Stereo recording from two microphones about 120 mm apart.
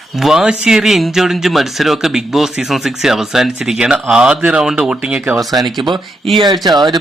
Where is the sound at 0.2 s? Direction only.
5° right (ahead or behind).